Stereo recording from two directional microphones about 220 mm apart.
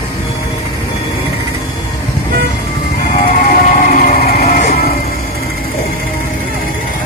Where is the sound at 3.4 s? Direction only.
40° left (ahead or behind).